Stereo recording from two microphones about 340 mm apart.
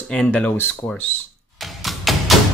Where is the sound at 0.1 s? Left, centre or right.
Centre.